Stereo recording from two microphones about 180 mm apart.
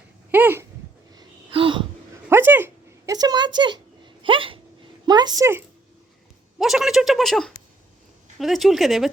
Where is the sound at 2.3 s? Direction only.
10° right (ahead or behind); by 4.6 s 30° right (ahead or behind).